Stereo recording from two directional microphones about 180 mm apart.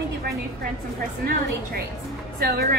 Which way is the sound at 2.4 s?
60° right (ahead or behind).